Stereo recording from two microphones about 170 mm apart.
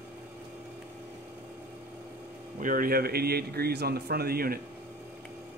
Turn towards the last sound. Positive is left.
turn(degrees=-60)  # may be behind; listen again after turning